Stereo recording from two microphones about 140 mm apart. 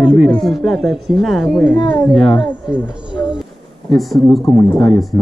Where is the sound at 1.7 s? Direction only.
35° left (ahead or behind).